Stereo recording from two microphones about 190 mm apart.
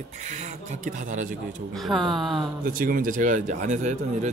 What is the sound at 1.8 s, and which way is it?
Speech, centre (ahead or behind).